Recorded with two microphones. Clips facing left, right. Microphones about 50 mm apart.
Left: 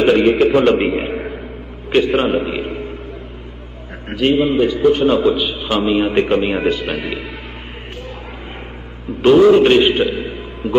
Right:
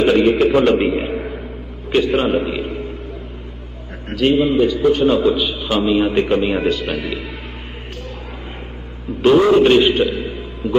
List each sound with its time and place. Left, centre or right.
0.0 s a man's voice: centre
2.6 s a sound: left
4.1 s a man's voice: centre
9.6 s a man's voice: centre